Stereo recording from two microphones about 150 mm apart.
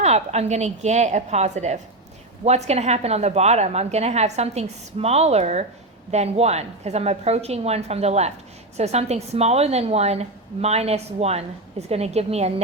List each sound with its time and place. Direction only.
0.0 s a woman's voice: 45° right (ahead or behind)